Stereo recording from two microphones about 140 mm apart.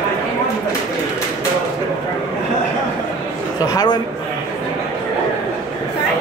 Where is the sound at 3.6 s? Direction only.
25° left (ahead or behind).